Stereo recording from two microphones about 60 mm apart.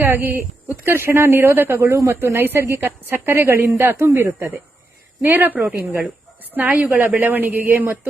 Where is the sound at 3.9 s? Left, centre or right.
Right.